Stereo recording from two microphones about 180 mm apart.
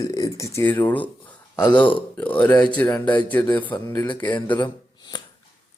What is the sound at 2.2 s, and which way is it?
Speech, 10° left (ahead or behind).